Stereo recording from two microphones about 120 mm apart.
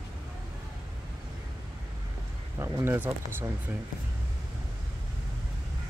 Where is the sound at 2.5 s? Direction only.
25° right (ahead or behind).